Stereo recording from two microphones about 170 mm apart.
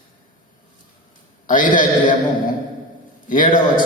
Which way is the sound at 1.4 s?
50° left (ahead or behind).